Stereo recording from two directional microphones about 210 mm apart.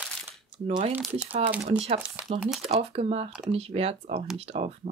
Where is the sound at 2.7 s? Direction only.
30° right (ahead or behind).